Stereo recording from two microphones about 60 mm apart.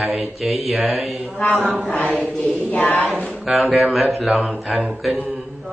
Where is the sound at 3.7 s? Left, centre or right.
Centre.